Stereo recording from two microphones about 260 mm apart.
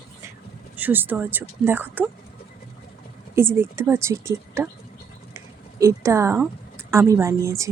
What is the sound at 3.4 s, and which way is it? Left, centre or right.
Speech, centre.